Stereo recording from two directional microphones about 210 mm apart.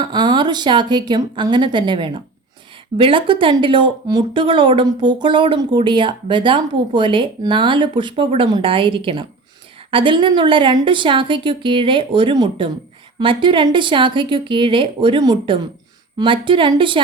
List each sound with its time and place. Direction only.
0.0 s speech: 20° right (ahead or behind)